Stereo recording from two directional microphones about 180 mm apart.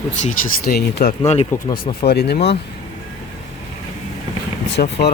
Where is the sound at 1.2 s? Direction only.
35° left (ahead or behind).